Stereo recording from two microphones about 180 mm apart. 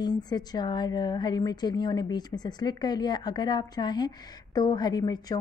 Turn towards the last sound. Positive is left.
turn(degrees=20)  # may be behind; listen again after turning